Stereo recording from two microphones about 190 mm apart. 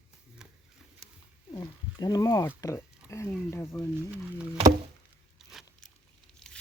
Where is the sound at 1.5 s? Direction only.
20° left (ahead or behind).